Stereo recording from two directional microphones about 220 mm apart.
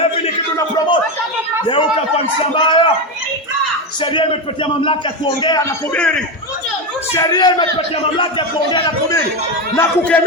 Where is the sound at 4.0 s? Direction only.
20° left (ahead or behind).